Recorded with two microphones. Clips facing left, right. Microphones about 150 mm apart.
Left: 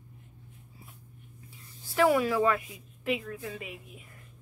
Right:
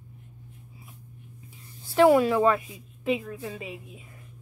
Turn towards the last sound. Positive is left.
turn(degrees=-25)  # may be behind; listen again after turning